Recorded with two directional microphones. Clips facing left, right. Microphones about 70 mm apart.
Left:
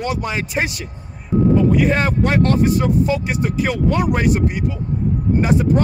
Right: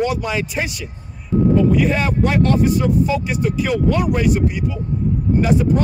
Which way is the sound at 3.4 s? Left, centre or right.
Left.